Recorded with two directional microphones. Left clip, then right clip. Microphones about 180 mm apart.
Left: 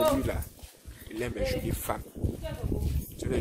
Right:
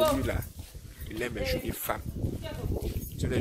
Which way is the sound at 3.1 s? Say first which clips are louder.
Left 1 dB; 10° left (ahead or behind).